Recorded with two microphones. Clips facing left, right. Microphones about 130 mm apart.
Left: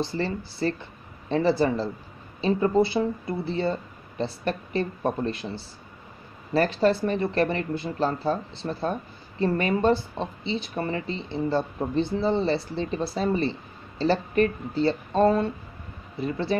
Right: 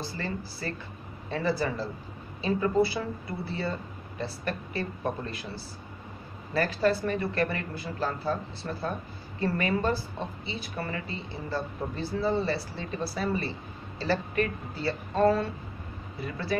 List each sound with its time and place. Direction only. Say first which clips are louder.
0.0 s a woman's voice: left 7 dB; 25° left (ahead or behind)
6.5 s a woman's voice: left 4 dB; 25° left (ahead or behind)